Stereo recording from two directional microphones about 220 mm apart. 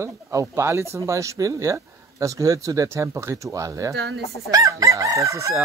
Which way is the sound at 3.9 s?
50° right (ahead or behind).